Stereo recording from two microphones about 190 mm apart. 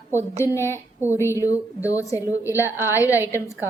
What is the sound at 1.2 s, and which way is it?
Speech, 15° left (ahead or behind).